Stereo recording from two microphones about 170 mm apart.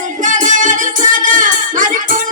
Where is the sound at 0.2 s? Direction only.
50° right (ahead or behind).